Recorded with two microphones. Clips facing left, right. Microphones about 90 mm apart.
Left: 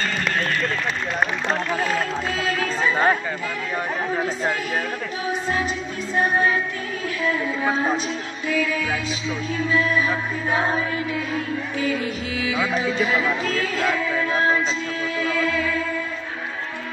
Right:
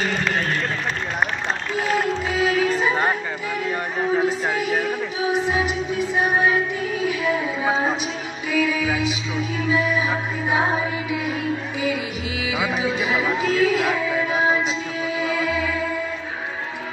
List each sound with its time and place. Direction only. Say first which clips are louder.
2.0 s music: right 3 dB; 10° right (ahead or behind)
12.4 s speech: even; 5° right (ahead or behind)
15.1 s music: even; 10° right (ahead or behind)